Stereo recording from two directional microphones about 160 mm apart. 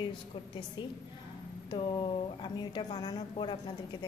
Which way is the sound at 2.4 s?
30° left (ahead or behind).